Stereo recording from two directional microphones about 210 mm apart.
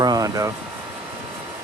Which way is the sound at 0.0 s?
15° right (ahead or behind).